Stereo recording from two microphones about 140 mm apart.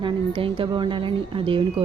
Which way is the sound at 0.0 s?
35° right (ahead or behind).